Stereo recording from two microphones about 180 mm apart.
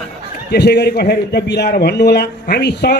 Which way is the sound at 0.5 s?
65° left (ahead or behind).